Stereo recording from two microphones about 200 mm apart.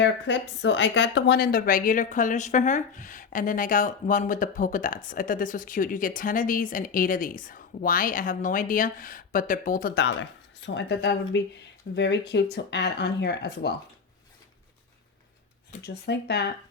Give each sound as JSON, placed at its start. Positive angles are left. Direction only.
{"t": 0.0, "sound": "a woman's voice", "side_deg": 60}
{"t": 15.8, "sound": "speech", "side_deg": 55}